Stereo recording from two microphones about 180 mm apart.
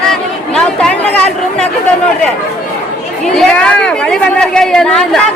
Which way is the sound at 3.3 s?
5° left (ahead or behind).